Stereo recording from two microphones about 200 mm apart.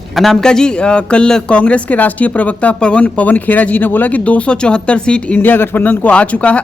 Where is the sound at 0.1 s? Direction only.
Centre (ahead or behind).